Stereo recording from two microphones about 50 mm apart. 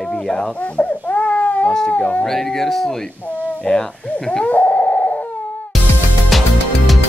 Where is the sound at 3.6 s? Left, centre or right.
Centre.